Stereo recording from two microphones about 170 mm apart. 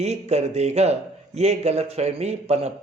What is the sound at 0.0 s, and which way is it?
A man's voice, 40° right (ahead or behind).